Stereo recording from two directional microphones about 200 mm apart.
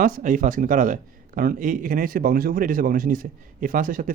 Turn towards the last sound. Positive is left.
turn(degrees=-40)  # may be behind; listen again after turning